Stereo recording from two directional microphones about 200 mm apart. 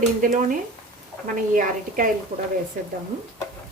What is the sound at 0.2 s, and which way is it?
Speech, 45° right (ahead or behind).